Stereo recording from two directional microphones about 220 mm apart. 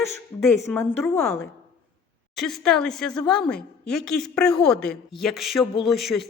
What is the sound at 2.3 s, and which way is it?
A woman's voice, centre (ahead or behind).